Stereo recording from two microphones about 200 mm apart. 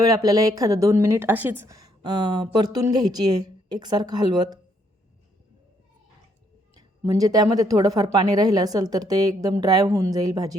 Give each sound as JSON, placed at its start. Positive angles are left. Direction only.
{"t": 0.0, "sound": "a woman's voice", "side_deg": -15}
{"t": 6.7, "sound": "a woman's voice", "side_deg": -15}